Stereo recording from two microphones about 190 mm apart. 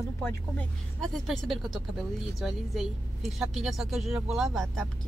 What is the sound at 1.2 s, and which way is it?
Speech, centre (ahead or behind).